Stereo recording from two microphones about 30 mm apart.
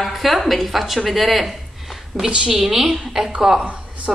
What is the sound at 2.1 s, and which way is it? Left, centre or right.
Speech, left.